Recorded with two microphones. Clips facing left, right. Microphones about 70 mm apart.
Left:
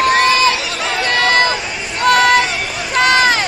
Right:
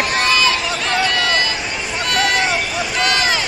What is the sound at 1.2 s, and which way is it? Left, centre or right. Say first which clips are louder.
Run: left 5 dB; left.